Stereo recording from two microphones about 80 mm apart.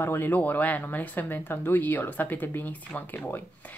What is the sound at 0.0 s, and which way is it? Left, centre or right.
Speech, left.